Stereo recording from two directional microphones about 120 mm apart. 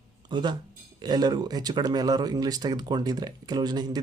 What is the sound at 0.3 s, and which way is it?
Speech, 40° right (ahead or behind).